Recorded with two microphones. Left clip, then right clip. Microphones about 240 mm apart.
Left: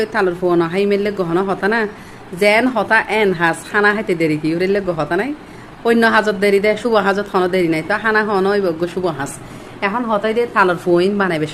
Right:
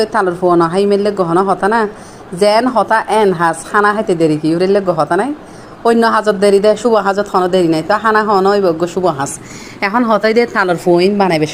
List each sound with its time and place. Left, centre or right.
0.0 s a woman's voice: centre
9.8 s a woman's voice: right
10.8 s a woman's voice: centre